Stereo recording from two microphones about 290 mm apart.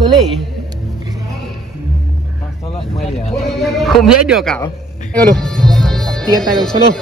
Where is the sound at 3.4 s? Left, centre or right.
Centre.